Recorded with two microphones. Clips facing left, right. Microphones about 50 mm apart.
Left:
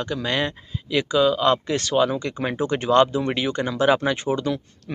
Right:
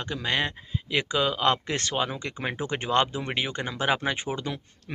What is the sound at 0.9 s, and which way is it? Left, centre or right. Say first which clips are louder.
Speech: left 7 dB; right.